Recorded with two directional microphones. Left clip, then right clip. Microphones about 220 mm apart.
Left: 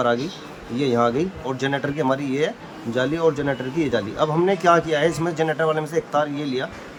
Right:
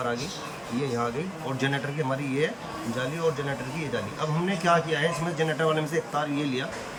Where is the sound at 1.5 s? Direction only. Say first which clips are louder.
Left 5 dB; 30° left (ahead or behind).